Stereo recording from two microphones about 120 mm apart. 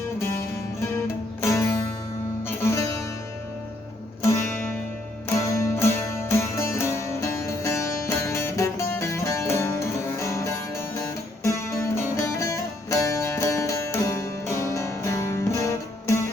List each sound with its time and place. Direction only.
0.8 s music: 20° left (ahead or behind)
4.2 s music: 20° left (ahead or behind)